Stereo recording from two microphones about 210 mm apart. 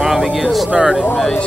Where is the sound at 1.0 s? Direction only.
5° left (ahead or behind).